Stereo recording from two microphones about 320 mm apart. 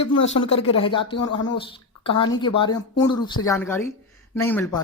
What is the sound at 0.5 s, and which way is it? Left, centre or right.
Speech, centre.